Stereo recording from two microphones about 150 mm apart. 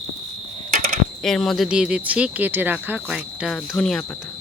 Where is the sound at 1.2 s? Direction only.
5° left (ahead or behind).